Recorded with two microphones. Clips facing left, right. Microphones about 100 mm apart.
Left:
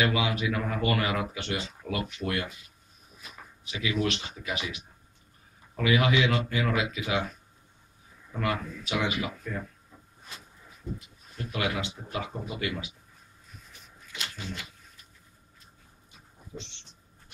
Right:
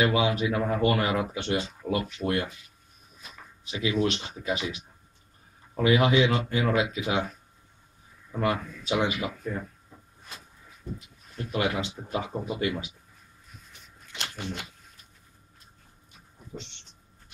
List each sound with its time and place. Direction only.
0.0 s speech: 30° right (ahead or behind)
3.7 s speech: 30° right (ahead or behind)
5.8 s speech: 30° right (ahead or behind)
8.4 s speech: 25° right (ahead or behind)
11.3 s speech: 30° right (ahead or behind)
14.0 s a sound: 65° right (ahead or behind)